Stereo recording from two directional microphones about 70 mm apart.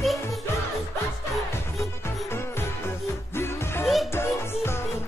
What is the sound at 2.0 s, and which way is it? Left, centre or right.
Music, left.